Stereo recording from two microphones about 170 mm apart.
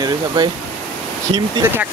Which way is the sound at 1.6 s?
15° right (ahead or behind).